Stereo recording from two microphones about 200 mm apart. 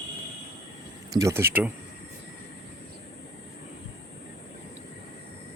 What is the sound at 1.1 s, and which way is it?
Speech, 15° right (ahead or behind).